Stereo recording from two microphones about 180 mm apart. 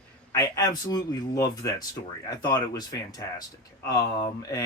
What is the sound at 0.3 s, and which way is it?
Speech, 20° left (ahead or behind).